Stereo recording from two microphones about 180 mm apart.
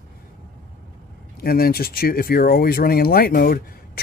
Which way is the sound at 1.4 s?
55° left (ahead or behind).